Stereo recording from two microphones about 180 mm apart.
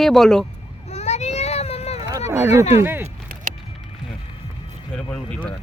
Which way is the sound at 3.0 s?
45° right (ahead or behind).